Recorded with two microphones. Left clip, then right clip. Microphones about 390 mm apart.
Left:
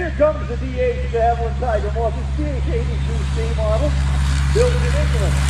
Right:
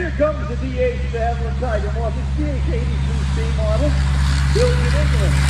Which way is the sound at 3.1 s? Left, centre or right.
Centre.